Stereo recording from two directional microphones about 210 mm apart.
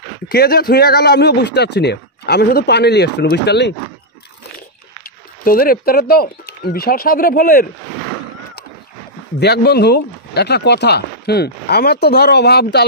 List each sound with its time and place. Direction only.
0.3 s speech: 45° left (ahead or behind)
5.4 s speech: 45° left (ahead or behind)
9.4 s speech: 50° left (ahead or behind)